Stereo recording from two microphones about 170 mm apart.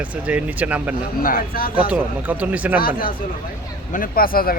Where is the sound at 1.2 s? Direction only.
55° left (ahead or behind).